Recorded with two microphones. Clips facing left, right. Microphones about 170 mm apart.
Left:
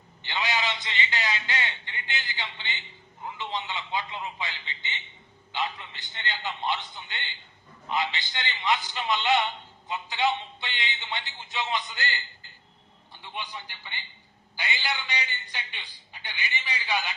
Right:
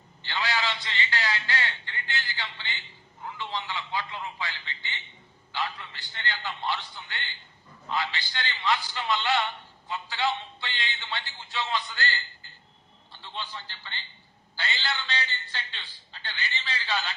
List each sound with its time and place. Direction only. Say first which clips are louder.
0.2 s a sound: even; 20° left (ahead or behind)
3.2 s a man's voice: left 1 dB; 20° left (ahead or behind)
13.2 s a man's voice: left 1 dB; 15° left (ahead or behind)